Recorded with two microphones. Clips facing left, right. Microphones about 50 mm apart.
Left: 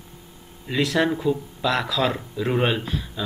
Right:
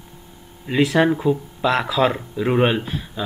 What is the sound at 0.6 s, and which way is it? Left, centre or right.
Speech, centre.